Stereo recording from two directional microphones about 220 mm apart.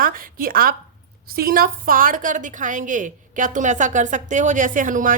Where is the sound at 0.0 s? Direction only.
40° right (ahead or behind).